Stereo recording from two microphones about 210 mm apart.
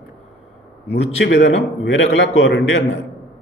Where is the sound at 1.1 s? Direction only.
55° left (ahead or behind).